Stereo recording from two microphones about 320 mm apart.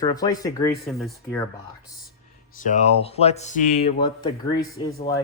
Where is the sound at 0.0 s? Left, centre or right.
Centre.